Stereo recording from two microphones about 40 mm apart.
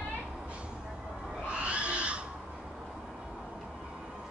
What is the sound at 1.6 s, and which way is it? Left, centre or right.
Wild animals, right.